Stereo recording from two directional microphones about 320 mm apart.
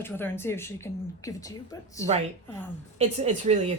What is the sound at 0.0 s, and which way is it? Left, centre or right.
A woman's voice, centre.